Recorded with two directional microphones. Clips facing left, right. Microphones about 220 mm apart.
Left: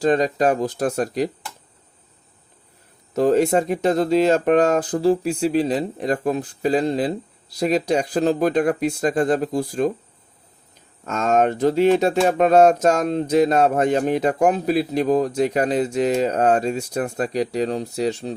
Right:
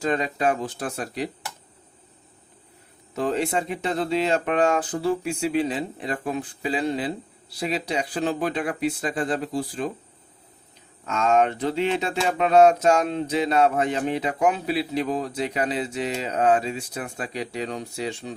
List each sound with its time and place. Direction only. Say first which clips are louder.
0.0 s speech: left 6 dB; 35° left (ahead or behind)
3.2 s speech: left 8 dB; 40° left (ahead or behind)
11.0 s speech: left 2 dB; 45° left (ahead or behind)